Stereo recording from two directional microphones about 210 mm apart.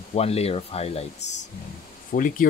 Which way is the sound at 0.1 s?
30° left (ahead or behind).